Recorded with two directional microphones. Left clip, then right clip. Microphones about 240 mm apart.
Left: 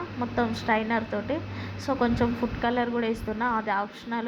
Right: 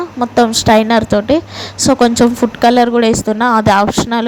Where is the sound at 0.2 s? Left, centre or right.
Right.